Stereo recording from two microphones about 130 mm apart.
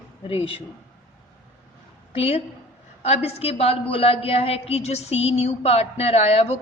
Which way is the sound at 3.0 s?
50° left (ahead or behind).